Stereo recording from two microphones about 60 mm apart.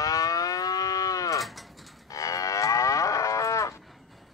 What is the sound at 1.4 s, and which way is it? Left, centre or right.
Mechanisms, centre.